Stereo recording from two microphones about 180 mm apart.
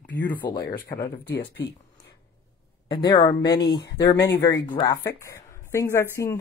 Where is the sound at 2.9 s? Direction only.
25° left (ahead or behind).